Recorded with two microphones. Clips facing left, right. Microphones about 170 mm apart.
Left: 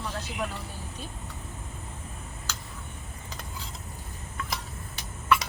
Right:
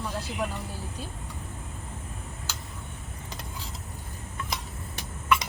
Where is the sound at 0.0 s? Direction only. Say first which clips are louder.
Right 2 dB; 10° right (ahead or behind).